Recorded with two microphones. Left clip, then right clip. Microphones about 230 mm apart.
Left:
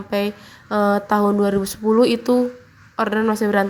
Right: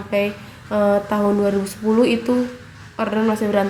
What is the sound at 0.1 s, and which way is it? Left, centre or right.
A woman's voice, left.